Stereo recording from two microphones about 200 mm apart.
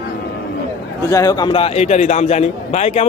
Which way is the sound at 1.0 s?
15° left (ahead or behind).